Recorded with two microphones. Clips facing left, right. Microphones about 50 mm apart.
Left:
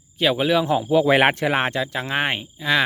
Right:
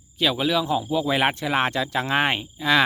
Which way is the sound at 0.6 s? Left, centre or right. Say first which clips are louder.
Left 5 dB; left.